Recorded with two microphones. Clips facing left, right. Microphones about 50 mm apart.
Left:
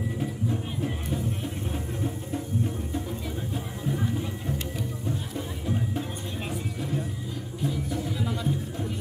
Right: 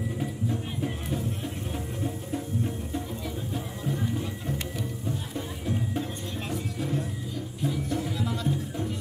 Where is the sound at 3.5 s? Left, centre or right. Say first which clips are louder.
Left 1 dB; centre.